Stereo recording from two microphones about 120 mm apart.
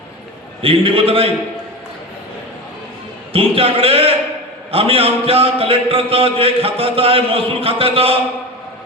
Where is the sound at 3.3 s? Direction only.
50° right (ahead or behind).